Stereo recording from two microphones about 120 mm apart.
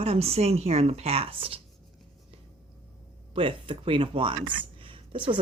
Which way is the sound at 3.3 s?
45° right (ahead or behind).